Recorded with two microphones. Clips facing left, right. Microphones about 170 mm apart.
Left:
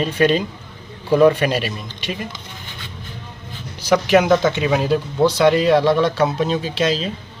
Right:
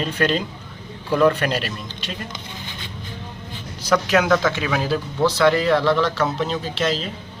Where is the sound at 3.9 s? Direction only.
15° left (ahead or behind).